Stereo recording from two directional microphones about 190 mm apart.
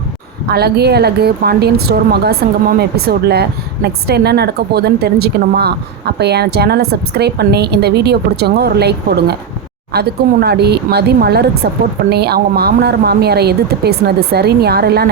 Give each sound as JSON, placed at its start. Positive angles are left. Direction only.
{"t": 0.4, "sound": "speech", "side_deg": -55}